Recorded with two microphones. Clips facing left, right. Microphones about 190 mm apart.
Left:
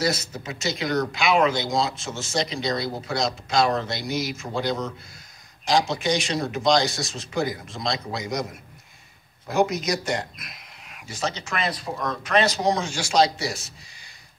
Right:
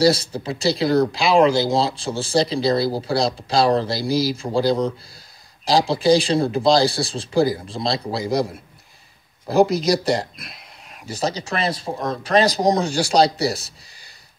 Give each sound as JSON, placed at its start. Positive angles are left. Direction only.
{"t": 0.0, "sound": "speech", "side_deg": -30}